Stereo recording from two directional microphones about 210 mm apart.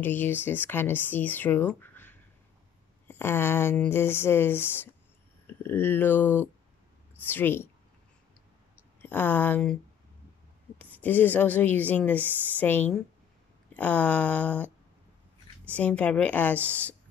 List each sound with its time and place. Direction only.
0.0 s a woman's voice: 10° left (ahead or behind)
9.0 s a woman's voice: 10° left (ahead or behind)
10.8 s a woman's voice: 10° left (ahead or behind)
15.7 s a woman's voice: 5° left (ahead or behind)